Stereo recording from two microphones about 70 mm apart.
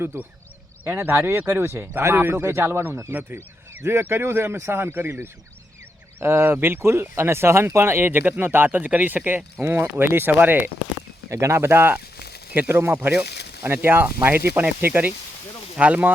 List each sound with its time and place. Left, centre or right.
0.0 s speech: right
6.1 s speech: right
11.3 s speech: right